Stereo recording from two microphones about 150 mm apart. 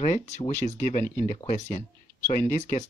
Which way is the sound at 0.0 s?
55° left (ahead or behind).